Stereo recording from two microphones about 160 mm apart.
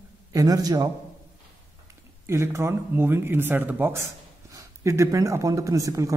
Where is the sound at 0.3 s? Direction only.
20° right (ahead or behind).